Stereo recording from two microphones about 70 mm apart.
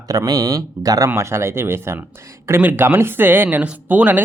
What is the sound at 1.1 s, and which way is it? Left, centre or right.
Speech, right.